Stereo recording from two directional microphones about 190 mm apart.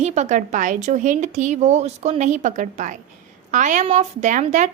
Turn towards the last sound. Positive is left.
turn(degrees=-40)  # may be behind; listen again after turning